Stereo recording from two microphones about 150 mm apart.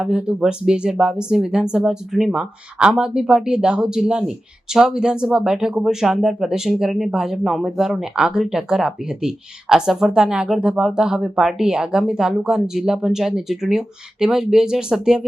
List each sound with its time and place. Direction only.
0.0 s speech: 5° right (ahead or behind)